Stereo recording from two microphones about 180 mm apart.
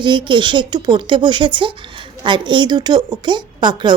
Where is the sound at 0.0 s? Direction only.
25° right (ahead or behind).